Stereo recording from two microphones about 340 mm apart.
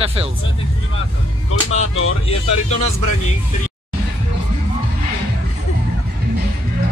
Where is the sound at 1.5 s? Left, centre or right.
Left.